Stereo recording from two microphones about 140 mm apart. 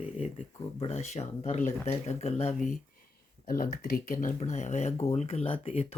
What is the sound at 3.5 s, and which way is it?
Speech, 90° left.